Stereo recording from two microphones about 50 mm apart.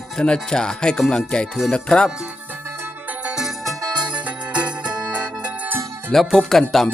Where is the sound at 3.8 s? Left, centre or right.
Centre.